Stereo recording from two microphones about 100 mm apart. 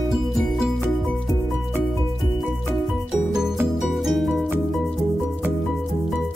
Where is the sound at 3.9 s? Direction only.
Centre (ahead or behind).